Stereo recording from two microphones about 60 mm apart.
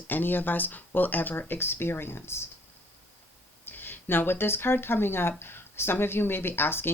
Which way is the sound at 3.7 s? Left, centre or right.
Left.